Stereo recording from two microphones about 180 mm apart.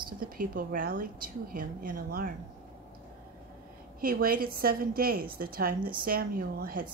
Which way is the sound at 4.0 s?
55° right (ahead or behind).